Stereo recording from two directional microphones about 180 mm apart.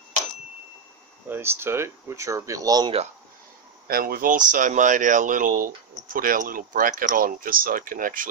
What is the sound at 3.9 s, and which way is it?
Speech, 55° right (ahead or behind).